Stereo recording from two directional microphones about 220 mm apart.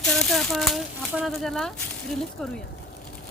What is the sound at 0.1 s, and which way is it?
Speech, centre (ahead or behind).